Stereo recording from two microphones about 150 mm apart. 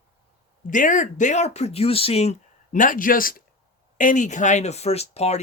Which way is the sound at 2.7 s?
65° left (ahead or behind).